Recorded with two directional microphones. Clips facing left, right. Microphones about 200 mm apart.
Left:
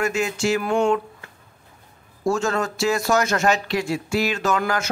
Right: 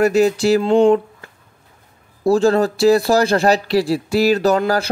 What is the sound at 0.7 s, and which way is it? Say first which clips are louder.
Speech: right 8 dB; 20° right (ahead or behind).